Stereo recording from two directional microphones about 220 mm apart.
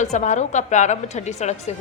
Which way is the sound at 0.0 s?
35° left (ahead or behind).